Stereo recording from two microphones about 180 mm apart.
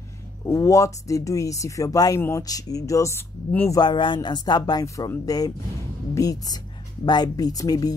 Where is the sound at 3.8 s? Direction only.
25° left (ahead or behind).